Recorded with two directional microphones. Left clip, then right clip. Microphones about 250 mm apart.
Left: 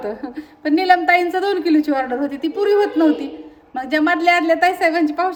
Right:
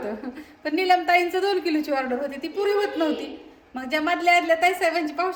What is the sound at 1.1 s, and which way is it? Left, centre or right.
A woman's voice, centre.